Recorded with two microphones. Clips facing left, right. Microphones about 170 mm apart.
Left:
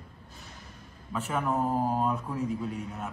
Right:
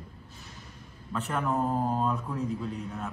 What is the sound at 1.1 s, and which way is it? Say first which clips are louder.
Speech: even; 5° left (ahead or behind).